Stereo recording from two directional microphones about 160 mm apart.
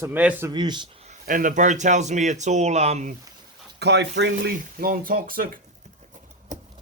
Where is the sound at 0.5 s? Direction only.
25° right (ahead or behind).